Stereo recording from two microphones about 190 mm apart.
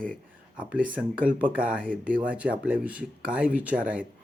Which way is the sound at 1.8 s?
45° right (ahead or behind).